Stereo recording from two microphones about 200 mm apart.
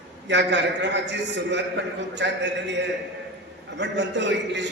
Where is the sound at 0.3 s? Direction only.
60° right (ahead or behind).